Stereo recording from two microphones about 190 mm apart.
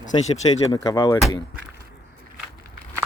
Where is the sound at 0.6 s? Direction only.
20° left (ahead or behind).